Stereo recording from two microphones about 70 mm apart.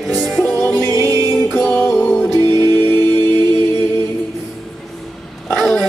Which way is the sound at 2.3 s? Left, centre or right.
Right.